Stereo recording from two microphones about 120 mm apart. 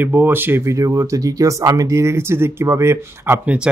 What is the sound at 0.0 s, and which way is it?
Speech, 15° right (ahead or behind).